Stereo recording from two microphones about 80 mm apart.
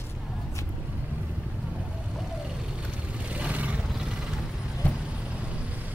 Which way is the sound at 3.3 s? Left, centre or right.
Centre.